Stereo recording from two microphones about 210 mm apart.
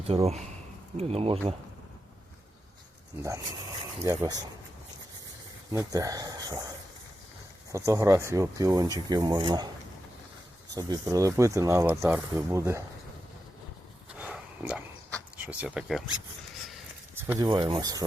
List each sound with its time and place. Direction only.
0.1 s speech: 25° right (ahead or behind)
3.2 s speech: 15° right (ahead or behind)
5.7 s speech: 15° right (ahead or behind)
7.7 s speech: 15° right (ahead or behind)
10.8 s speech: 15° right (ahead or behind)
14.2 s a sound: 5° right (ahead or behind)
15.4 s speech: 5° right (ahead or behind)
17.2 s speech: 15° right (ahead or behind)